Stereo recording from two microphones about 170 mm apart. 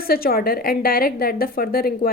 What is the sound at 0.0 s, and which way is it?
A woman's voice, 60° left (ahead or behind).